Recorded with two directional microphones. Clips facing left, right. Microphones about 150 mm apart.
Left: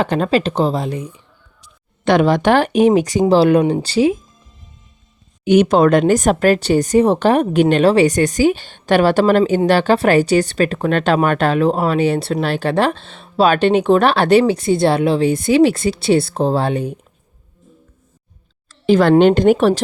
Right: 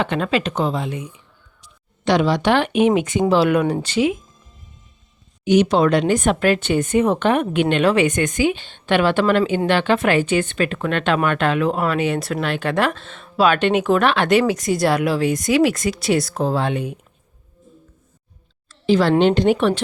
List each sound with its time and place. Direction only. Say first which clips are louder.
0.0 s speech: left 4 dB; 40° left (ahead or behind)
2.0 s speech: left 4 dB; 50° left (ahead or behind); by 4.2 s 35° left (ahead or behind)
5.5 s speech: left 4 dB; 50° left (ahead or behind); by 17.0 s 35° left (ahead or behind)
18.9 s a woman's voice: left 4 dB; 50° left (ahead or behind)